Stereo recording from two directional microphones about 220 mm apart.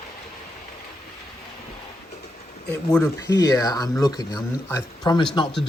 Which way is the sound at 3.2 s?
15° left (ahead or behind).